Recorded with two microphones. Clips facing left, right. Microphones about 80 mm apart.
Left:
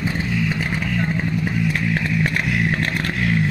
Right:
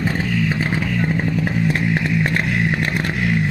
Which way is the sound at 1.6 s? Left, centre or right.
Right.